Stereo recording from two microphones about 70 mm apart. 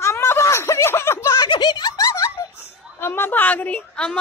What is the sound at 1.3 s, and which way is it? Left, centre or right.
Giggle, left.